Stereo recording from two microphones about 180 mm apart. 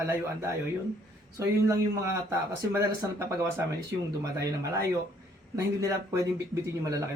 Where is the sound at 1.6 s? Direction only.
15° right (ahead or behind).